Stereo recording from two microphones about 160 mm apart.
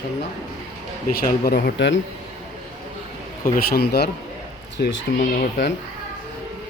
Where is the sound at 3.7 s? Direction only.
85° left.